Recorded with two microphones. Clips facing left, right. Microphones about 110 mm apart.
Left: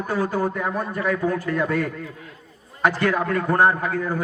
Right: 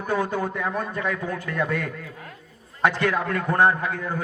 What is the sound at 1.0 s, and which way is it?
Speech, 35° left (ahead or behind).